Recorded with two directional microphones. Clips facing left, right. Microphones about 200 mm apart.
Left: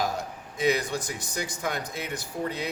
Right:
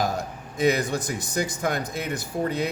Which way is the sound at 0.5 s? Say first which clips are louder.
Right 3 dB; 45° right (ahead or behind).